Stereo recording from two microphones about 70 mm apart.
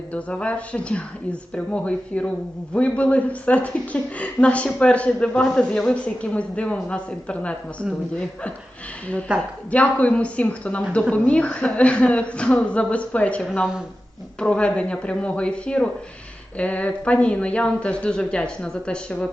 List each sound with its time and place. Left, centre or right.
0.1 s a woman's voice: centre
9.3 s a woman's voice: centre
9.7 s a woman's voice: centre